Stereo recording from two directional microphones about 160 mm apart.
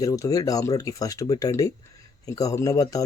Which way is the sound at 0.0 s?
20° left (ahead or behind).